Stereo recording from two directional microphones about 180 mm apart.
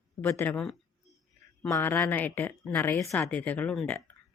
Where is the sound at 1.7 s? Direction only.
15° left (ahead or behind).